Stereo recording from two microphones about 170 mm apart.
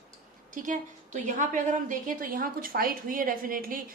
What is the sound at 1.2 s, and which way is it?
A woman's voice, 50° right (ahead or behind).